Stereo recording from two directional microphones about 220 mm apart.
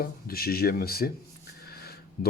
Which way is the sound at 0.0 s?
45° left (ahead or behind).